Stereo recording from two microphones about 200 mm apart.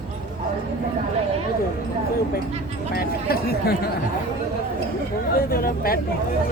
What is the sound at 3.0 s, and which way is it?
Speech, 50° left (ahead or behind).